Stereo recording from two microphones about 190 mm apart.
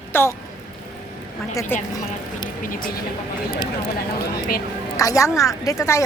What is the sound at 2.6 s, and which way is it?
Speech, 50° left (ahead or behind).